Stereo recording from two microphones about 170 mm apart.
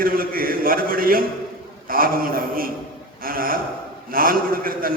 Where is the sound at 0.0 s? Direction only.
60° right (ahead or behind).